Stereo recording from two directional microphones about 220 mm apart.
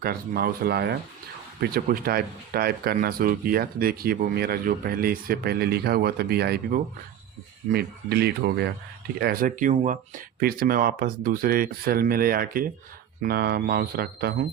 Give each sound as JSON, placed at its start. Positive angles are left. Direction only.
{"t": 0.0, "sound": "speech", "side_deg": -45}
{"t": 9.2, "sound": "speech", "side_deg": -40}